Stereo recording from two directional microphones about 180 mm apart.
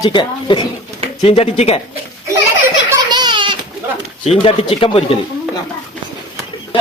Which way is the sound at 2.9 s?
25° right (ahead or behind).